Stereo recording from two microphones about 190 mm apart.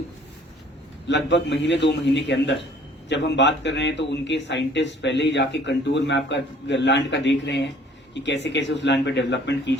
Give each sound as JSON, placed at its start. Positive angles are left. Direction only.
{"t": 1.0, "sound": "speech", "side_deg": 70}